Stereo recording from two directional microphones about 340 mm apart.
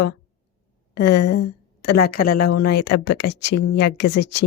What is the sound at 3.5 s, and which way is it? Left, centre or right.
Speech, left.